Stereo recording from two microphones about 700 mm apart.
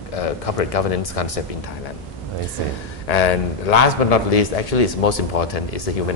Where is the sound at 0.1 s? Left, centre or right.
Left.